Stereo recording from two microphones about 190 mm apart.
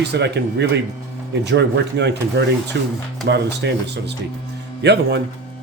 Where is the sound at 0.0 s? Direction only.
60° right (ahead or behind).